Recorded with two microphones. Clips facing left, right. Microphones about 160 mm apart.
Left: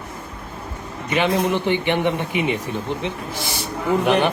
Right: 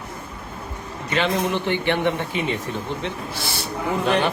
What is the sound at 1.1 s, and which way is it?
A man's voice, 15° left (ahead or behind).